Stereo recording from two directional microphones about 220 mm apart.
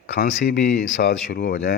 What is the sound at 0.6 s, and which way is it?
Speech, 35° left (ahead or behind).